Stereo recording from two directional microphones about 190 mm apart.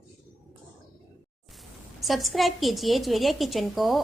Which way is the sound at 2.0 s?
Centre (ahead or behind).